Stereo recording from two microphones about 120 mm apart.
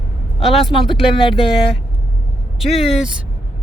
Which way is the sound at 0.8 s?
45° left (ahead or behind).